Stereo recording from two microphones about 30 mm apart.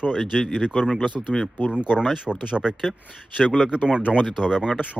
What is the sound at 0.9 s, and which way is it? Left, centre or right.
Speech, left.